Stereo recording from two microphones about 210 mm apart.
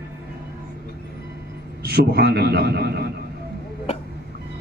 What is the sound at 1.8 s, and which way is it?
A man's voice, 50° right (ahead or behind).